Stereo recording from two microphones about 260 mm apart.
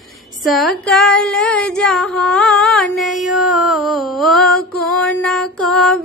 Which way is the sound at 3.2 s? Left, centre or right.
Centre.